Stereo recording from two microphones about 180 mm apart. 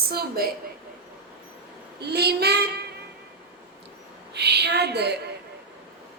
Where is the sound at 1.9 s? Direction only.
65° right (ahead or behind).